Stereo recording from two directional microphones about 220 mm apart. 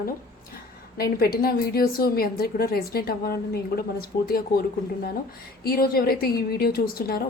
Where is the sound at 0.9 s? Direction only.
45° left (ahead or behind).